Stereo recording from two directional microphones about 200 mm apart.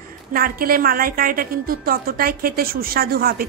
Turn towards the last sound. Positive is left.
turn(degrees=-50)  # may be behind; listen again after turning